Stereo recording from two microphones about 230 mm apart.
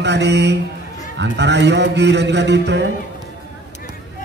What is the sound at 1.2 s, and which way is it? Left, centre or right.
A man's voice, right.